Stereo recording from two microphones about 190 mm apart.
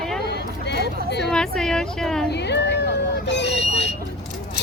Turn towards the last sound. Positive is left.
turn(degrees=65)  # may be behind; listen again after turning